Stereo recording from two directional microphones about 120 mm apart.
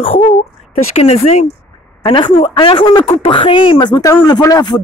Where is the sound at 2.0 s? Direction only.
45° left (ahead or behind).